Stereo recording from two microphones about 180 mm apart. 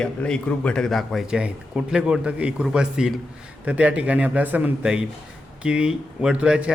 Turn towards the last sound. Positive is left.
turn(degrees=-5)  # may be behind; listen again after turning